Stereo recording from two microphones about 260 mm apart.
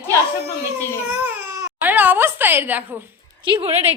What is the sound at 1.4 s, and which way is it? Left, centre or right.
Speech, centre.